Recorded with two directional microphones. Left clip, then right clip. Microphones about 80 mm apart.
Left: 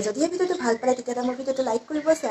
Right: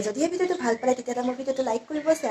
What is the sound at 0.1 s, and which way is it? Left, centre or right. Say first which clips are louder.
Speech: left 1 dB; centre.